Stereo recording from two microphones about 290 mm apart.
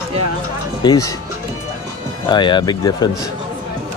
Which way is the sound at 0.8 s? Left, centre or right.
Centre.